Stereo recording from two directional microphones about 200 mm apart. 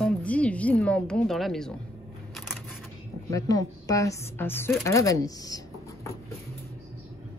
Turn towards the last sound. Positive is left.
turn(degrees=20)  # may be behind; listen again after turning